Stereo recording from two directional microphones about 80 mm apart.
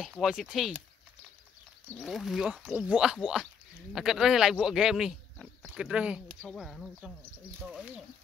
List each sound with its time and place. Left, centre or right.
0.0 s speech: centre
2.0 s speech: centre
6.5 s speech: centre
7.6 s speech: centre